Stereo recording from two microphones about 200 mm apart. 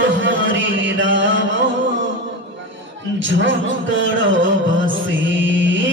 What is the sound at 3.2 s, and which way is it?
Music, 65° right (ahead or behind).